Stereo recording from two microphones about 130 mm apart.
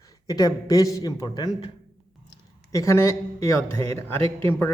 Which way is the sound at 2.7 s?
20° left (ahead or behind).